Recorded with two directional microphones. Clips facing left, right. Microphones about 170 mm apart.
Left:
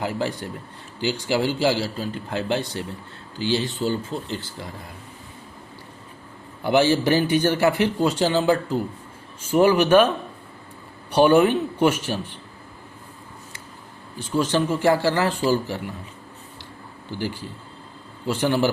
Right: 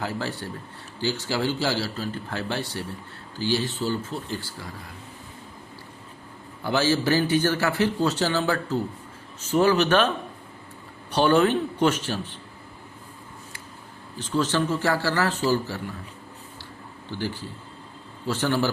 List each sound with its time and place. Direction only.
0.0 s a man's voice: 15° left (ahead or behind)
6.7 s a man's voice: 15° left (ahead or behind)
11.1 s a man's voice: 10° left (ahead or behind)
14.2 s a man's voice: 10° left (ahead or behind)
17.1 s a man's voice: 15° left (ahead or behind)